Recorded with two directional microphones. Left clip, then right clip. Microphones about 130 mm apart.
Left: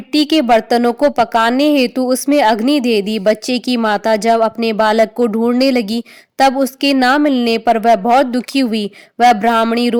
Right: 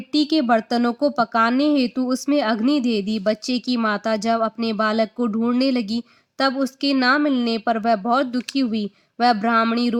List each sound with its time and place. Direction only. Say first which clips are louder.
0.1 s speech: left 7 dB; 45° left (ahead or behind)
9.5 s a sound: left 6 dB; 30° left (ahead or behind)
9.7 s speech: left 8 dB; 45° left (ahead or behind)